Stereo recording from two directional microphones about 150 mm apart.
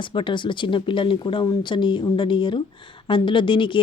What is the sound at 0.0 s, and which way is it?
Speech, 35° left (ahead or behind).